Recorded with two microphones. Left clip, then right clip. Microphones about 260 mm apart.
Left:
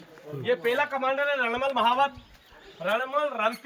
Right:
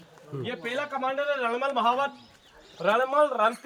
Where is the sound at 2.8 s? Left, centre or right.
Right.